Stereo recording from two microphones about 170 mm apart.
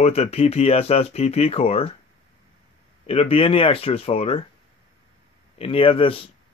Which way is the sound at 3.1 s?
35° left (ahead or behind).